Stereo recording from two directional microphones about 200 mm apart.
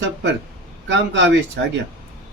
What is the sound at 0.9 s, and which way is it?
Speech, 60° right (ahead or behind).